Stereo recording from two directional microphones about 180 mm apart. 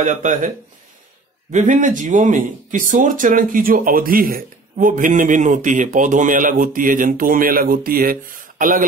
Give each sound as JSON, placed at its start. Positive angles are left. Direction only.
{"t": 0.0, "sound": "speech", "side_deg": -45}
{"t": 1.5, "sound": "speech", "side_deg": -45}